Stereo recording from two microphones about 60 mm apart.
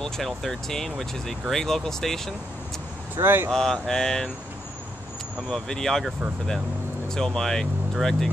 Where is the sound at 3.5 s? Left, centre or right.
Centre.